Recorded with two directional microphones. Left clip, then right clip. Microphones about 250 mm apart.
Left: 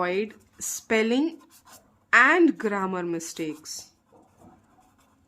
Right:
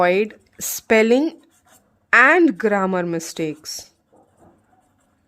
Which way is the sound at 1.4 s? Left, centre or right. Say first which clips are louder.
Left 2 dB; centre.